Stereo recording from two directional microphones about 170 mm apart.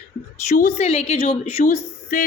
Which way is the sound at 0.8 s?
35° left (ahead or behind).